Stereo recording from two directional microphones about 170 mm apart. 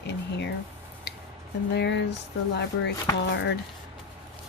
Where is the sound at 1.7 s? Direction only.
90° left.